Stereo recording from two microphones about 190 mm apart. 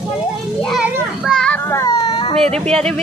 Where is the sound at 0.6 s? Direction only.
Centre (ahead or behind); by 2.3 s 20° left (ahead or behind).